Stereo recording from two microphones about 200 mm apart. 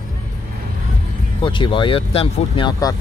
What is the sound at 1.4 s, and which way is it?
Speech, 25° left (ahead or behind).